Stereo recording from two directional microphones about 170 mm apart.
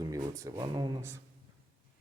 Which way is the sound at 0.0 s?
20° right (ahead or behind).